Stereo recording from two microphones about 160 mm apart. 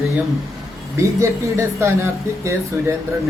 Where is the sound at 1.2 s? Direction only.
15° right (ahead or behind).